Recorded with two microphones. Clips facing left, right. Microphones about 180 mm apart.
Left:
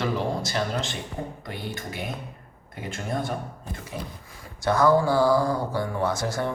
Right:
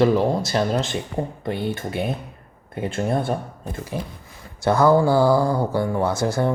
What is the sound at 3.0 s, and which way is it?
Speech, 55° right (ahead or behind).